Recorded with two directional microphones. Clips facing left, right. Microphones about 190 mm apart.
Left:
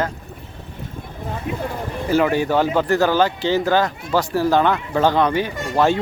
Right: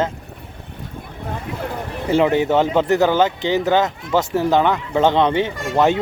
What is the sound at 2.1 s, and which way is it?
Speech, 20° right (ahead or behind).